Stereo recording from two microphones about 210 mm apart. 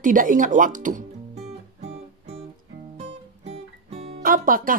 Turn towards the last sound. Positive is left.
turn(degrees=-40)  # may be behind; listen again after turning